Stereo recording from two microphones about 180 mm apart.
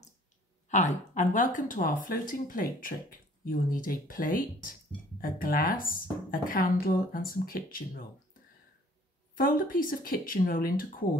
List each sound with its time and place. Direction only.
0.7 s speech: 40° left (ahead or behind)
9.3 s speech: 50° left (ahead or behind)